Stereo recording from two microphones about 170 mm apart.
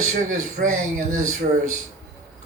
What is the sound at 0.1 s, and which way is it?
A man's voice, 50° right (ahead or behind).